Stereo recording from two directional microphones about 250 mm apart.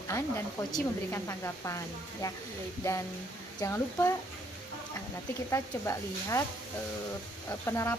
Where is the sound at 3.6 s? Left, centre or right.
Centre.